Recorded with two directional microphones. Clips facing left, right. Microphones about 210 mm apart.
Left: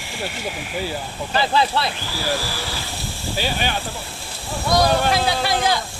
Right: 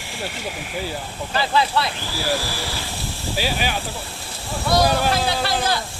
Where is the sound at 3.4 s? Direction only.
5° right (ahead or behind).